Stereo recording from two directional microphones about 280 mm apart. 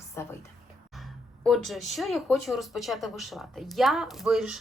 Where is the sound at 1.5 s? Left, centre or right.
Centre.